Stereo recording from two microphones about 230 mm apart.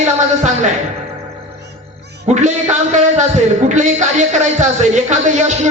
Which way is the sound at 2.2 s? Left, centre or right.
Right.